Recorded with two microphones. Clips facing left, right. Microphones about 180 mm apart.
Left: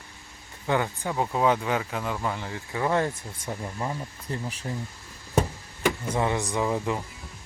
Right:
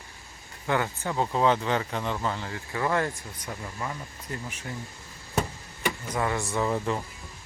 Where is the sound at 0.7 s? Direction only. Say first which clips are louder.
Left 1 dB; 15° left (ahead or behind).